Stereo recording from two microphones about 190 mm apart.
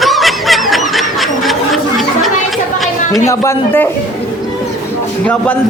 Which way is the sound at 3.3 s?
15° left (ahead or behind).